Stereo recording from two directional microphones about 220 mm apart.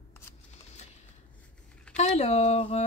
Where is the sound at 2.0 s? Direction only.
30° left (ahead or behind).